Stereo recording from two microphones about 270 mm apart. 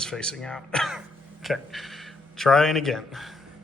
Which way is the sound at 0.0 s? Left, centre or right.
Centre.